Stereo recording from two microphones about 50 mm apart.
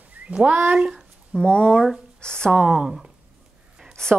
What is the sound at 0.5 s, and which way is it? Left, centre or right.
Speech, right.